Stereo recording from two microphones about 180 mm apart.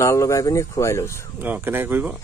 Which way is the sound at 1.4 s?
10° right (ahead or behind).